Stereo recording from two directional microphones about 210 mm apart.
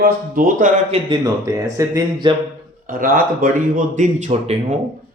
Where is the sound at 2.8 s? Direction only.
40° right (ahead or behind).